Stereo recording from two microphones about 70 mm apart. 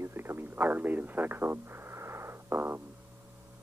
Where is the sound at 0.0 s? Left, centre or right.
Right.